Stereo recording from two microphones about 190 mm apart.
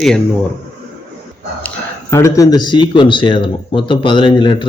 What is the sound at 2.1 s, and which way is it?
Speech, 15° left (ahead or behind).